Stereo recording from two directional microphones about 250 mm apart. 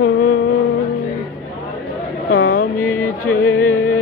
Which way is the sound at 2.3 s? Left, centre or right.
Left.